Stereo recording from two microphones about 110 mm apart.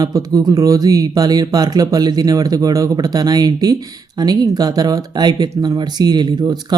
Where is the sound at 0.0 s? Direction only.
30° right (ahead or behind).